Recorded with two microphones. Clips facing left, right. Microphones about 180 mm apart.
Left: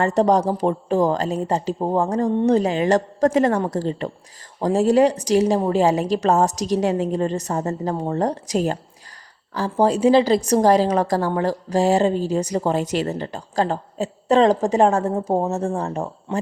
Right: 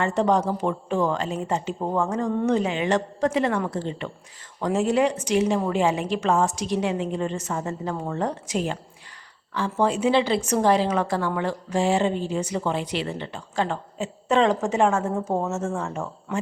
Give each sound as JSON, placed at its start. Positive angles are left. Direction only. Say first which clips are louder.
{"t": 0.0, "sound": "a woman's voice", "louder": "left 4 dB", "side_deg": 40}